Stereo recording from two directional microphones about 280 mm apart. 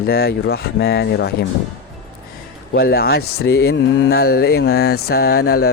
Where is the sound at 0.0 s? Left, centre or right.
Left.